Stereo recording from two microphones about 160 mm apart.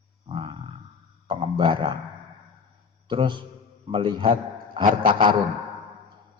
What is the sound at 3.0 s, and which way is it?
A man's voice, 30° right (ahead or behind).